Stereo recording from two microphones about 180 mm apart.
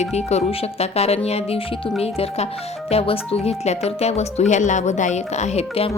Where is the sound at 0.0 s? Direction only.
35° left (ahead or behind).